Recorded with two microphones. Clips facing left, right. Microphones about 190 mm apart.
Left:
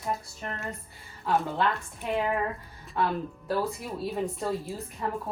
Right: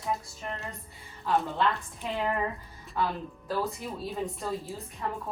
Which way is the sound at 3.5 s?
Centre (ahead or behind).